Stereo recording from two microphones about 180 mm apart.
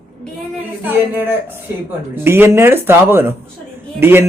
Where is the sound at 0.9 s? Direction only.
10° right (ahead or behind).